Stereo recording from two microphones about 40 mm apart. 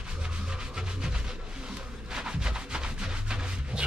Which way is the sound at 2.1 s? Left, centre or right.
Right.